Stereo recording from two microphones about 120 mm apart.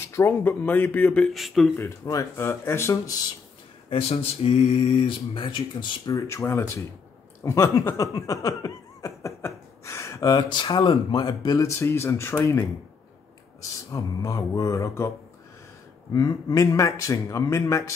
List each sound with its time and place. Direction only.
0.1 s speech: 20° left (ahead or behind)
1.3 s speech: centre (ahead or behind)
1.8 s speech: 25° left (ahead or behind)
3.9 s speech: 55° left (ahead or behind)
6.1 s speech: 25° left (ahead or behind)
7.4 s a sound: 25° left (ahead or behind)
10.3 s speech: 40° left (ahead or behind)
16.1 s speech: 30° left (ahead or behind)